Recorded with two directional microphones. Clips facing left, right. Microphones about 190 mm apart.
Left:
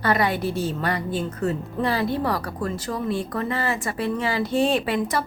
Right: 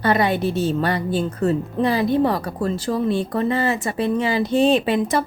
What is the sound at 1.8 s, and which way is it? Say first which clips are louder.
Speech: right 5 dB; 20° right (ahead or behind).